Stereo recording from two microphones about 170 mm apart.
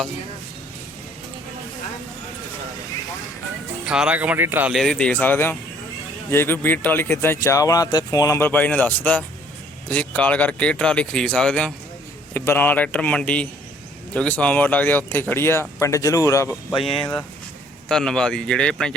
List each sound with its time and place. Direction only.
3.8 s speech: 5° right (ahead or behind)
4.7 s speech: centre (ahead or behind)
16.6 s speech: centre (ahead or behind)